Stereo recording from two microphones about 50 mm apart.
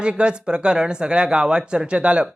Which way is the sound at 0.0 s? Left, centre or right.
Centre.